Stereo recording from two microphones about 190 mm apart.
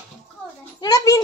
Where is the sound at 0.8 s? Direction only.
15° left (ahead or behind).